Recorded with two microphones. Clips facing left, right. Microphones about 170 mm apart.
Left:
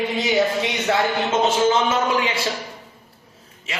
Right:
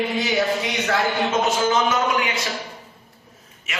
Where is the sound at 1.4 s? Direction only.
25° left (ahead or behind).